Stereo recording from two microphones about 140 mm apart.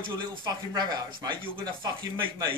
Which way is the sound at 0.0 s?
30° right (ahead or behind).